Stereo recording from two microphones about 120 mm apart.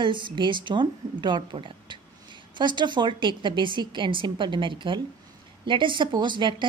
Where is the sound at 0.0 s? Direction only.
40° right (ahead or behind).